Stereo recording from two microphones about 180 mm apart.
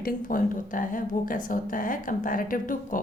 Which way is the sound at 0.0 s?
50° left (ahead or behind).